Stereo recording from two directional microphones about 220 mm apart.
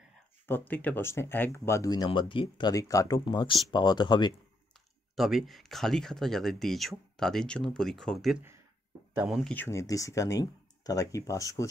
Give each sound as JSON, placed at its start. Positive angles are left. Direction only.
{"t": 0.5, "sound": "speech", "side_deg": 10}
{"t": 5.1, "sound": "speech", "side_deg": 0}
{"t": 9.4, "sound": "speech", "side_deg": 10}